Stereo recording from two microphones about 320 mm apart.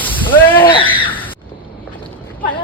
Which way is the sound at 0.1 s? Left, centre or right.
Centre.